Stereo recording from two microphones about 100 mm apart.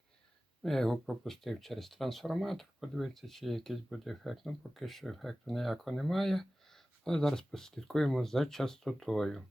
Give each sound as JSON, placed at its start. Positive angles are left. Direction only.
{"t": 0.6, "sound": "speech", "side_deg": 5}